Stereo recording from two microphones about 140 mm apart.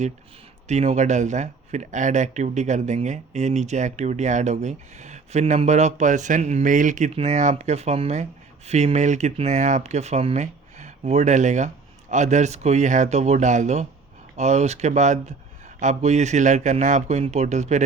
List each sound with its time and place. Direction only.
0.7 s speech: 55° right (ahead or behind)
7.1 s speech: 50° right (ahead or behind)